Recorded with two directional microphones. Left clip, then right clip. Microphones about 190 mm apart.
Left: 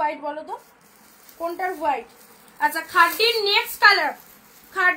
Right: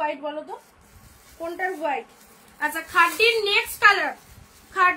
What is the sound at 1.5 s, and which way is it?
A woman's voice, 15° right (ahead or behind).